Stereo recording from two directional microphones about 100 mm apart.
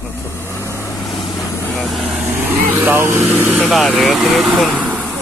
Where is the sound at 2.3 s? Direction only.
25° right (ahead or behind).